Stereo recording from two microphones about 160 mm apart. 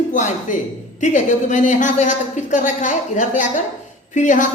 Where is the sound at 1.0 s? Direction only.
50° left (ahead or behind).